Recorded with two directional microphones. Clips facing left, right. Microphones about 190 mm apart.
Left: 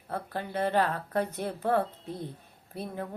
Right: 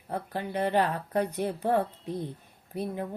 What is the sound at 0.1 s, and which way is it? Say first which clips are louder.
Speech: right 2 dB; 15° right (ahead or behind).